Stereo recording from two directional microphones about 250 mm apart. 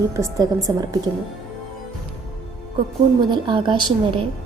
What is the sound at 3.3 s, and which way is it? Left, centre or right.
Speech, centre.